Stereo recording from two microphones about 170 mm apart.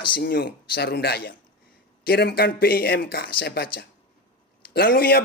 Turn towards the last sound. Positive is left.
turn(degrees=65)  # may be behind; listen again after turning